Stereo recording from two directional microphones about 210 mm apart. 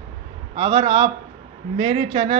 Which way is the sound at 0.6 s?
25° right (ahead or behind).